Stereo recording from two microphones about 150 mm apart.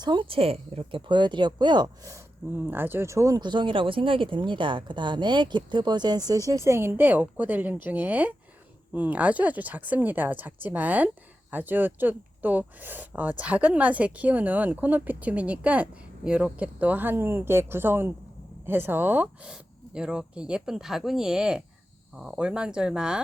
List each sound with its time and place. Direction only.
0.0 s speech: 30° right (ahead or behind); by 23.2 s 5° right (ahead or behind)